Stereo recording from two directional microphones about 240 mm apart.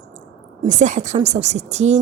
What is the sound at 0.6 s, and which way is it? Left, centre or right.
Speech, right.